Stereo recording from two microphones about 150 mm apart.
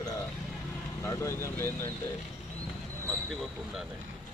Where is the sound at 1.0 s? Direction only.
20° left (ahead or behind).